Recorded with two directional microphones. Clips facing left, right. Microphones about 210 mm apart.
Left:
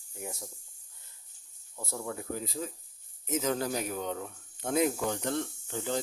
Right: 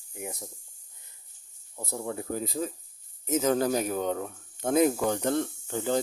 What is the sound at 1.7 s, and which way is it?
Speech, 20° right (ahead or behind).